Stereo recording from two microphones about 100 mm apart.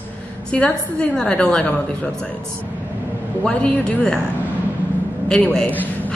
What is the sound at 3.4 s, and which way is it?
Speech, 10° left (ahead or behind).